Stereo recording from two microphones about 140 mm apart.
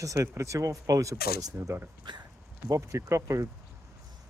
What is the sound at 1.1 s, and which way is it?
Speech, 90° left.